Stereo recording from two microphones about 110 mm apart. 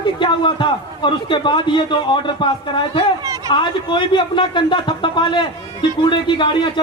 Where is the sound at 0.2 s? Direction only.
50° left (ahead or behind).